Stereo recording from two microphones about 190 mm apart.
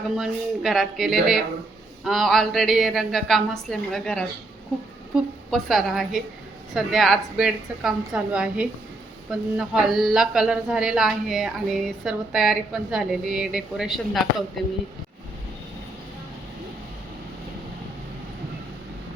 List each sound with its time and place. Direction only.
0.2 s a woman's voice: centre (ahead or behind)